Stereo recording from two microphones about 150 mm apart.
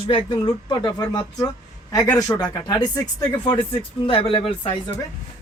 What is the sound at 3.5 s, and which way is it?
Speech, 40° left (ahead or behind).